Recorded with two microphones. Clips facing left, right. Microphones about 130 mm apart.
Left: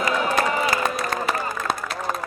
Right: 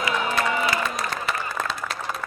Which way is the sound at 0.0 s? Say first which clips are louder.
Left 3 dB; 45° left (ahead or behind).